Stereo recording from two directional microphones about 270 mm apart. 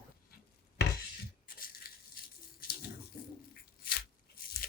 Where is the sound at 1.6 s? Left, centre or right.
Left.